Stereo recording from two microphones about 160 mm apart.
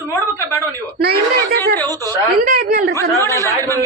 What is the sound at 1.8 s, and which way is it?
Speech, 15° left (ahead or behind).